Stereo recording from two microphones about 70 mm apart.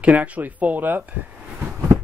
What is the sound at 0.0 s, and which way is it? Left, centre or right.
Speech, right.